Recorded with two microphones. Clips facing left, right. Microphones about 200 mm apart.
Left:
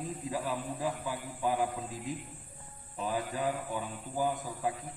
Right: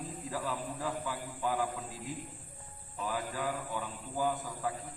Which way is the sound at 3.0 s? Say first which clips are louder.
Left 3 dB; 20° left (ahead or behind).